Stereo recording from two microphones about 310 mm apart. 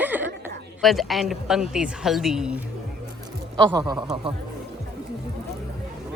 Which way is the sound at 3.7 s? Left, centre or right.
Centre.